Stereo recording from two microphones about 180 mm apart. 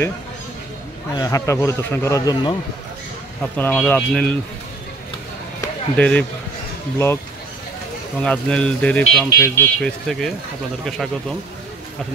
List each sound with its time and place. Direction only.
1.1 s speech: 20° left (ahead or behind)
3.5 s speech: 10° left (ahead or behind)
5.9 s speech: 5° left (ahead or behind)
8.2 s speech: 5° left (ahead or behind)